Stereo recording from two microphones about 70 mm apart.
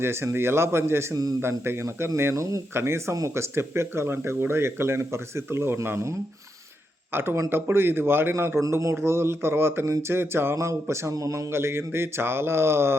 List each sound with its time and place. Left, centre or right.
0.0 s speech: right
2.3 s speech: right
2.7 s speech: right
11.5 s speech: right